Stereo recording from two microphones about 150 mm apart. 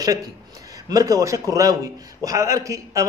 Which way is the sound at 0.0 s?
25° right (ahead or behind).